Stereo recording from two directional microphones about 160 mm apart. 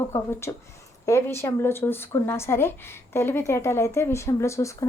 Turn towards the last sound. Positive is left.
turn(degrees=20)  # may be behind; listen again after turning